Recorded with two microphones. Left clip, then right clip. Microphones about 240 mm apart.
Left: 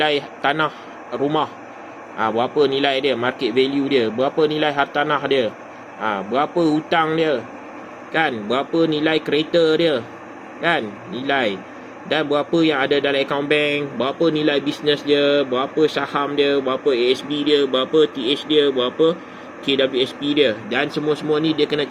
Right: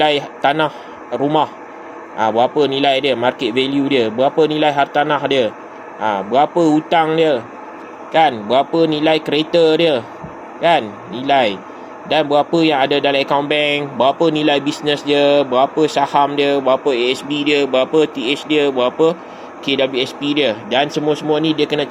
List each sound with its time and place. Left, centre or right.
0.0 s a man's voice: centre
16.6 s speech: right
16.9 s speech: centre
18.2 s speech: centre
18.9 s speech: right
19.7 s speech: centre